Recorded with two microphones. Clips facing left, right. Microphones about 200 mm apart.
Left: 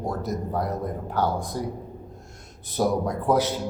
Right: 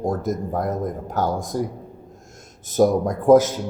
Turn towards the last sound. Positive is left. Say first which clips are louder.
# right 8 dB
turn(degrees=-45)  # may be behind; listen again after turning